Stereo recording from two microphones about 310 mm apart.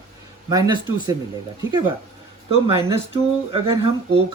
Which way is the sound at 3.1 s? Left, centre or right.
Centre.